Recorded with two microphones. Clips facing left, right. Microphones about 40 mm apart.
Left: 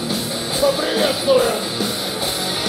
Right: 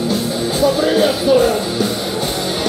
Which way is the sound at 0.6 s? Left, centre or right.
Centre.